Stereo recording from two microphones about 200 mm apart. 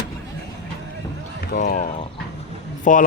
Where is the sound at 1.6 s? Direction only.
35° left (ahead or behind).